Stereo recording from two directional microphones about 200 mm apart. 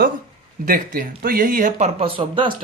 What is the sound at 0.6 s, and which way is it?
Speech, 40° right (ahead or behind).